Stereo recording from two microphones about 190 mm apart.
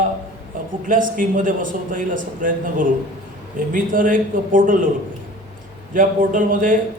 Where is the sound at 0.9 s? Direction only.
45° right (ahead or behind).